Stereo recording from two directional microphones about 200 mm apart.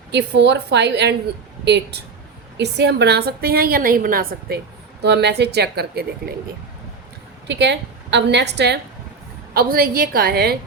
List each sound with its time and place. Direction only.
0.1 s a woman's voice: 60° right (ahead or behind)
7.4 s a woman's voice: 60° right (ahead or behind)